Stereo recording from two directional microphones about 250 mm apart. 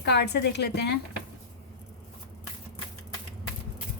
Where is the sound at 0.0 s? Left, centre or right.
Left.